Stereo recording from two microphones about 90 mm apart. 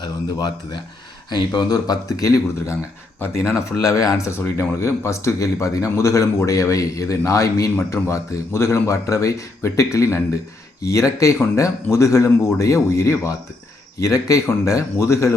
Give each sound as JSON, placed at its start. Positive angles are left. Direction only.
{"t": 0.0, "sound": "speech", "side_deg": 50}